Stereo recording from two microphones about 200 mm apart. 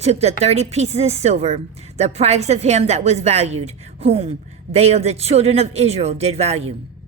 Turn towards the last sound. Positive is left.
turn(degrees=-30)  # may be behind; listen again after turning